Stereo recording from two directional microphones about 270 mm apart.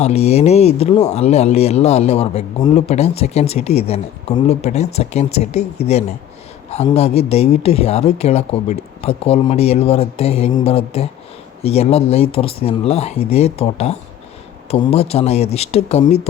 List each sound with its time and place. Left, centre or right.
0.0 s speech: left